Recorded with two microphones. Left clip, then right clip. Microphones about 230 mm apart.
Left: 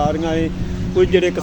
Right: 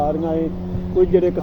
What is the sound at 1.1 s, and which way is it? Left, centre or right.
Speech, centre.